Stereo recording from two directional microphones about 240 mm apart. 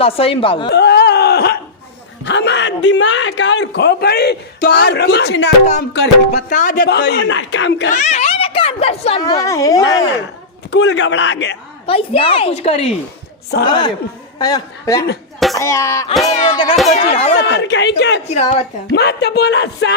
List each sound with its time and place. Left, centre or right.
0.0 s a woman's voice: left
0.7 s a sound: left
2.2 s a man's voice: left
5.9 s a man's voice: left
7.9 s a woman's voice: left; by 10.1 s centre
10.7 s a man's voice: left
11.9 s a woman's voice: left
17.4 s a man's voice: left